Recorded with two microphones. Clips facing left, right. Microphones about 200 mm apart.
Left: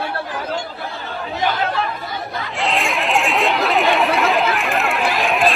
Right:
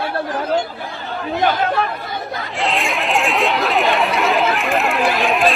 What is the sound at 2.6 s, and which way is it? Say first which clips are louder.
Chatter: even; centre (ahead or behind).